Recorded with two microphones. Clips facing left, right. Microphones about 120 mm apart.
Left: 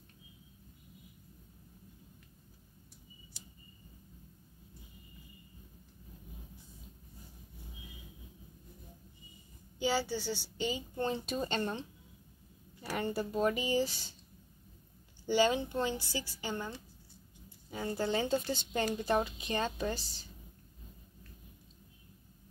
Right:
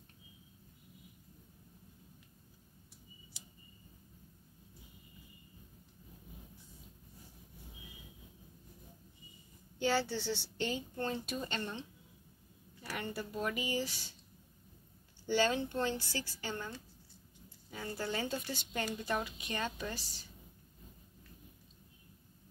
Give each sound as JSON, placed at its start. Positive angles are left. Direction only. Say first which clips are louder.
{"t": 9.8, "sound": "a woman's voice", "louder": "even", "side_deg": 5}
{"t": 11.0, "sound": "speech", "louder": "left 7 dB", "side_deg": 20}
{"t": 12.8, "sound": "speech", "louder": "left 6 dB", "side_deg": 30}
{"t": 15.2, "sound": "speech", "louder": "left 3 dB", "side_deg": 15}